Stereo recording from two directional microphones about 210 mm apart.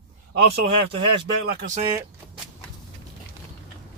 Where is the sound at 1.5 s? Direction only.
40° right (ahead or behind).